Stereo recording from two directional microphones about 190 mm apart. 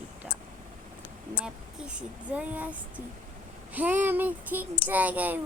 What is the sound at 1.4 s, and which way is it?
Speech, 5° right (ahead or behind).